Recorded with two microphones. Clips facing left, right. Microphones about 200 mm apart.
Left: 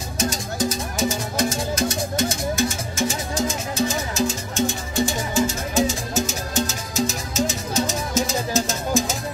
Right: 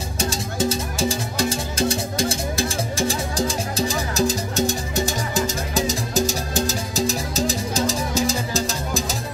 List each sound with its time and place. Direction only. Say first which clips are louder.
0.2 s music: even; 30° right (ahead or behind)